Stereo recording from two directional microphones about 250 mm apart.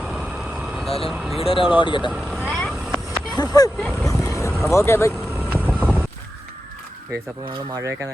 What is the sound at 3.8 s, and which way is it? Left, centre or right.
Speech, centre.